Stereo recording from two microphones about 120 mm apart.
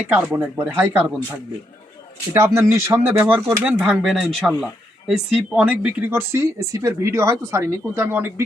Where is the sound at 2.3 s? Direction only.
20° right (ahead or behind).